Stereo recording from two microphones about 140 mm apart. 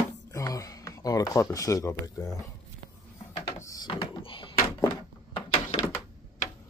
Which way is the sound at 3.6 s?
25° left (ahead or behind).